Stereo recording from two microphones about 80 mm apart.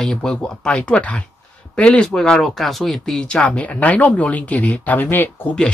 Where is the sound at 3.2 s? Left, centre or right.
Centre.